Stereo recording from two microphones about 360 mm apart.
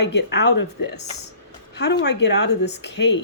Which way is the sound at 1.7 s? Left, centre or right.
Left.